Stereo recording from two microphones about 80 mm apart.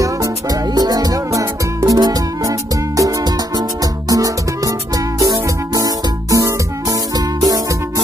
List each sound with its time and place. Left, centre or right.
0.0 s music: right